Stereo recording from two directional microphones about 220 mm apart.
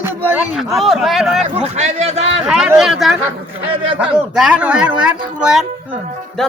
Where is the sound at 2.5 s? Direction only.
5° right (ahead or behind).